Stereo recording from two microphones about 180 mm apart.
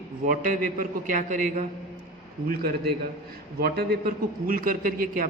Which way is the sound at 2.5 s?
60° right (ahead or behind).